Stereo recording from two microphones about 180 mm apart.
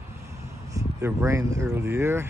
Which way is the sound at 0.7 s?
15° right (ahead or behind).